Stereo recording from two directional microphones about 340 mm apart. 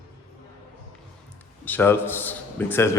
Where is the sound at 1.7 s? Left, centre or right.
Centre.